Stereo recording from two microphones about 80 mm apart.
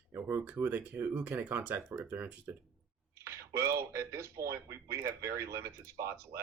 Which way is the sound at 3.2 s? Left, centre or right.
Right.